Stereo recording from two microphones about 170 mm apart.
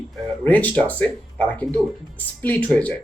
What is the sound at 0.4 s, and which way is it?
Speech, 10° left (ahead or behind).